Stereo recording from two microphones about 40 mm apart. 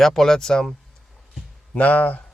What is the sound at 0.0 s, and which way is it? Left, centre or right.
Speech, centre.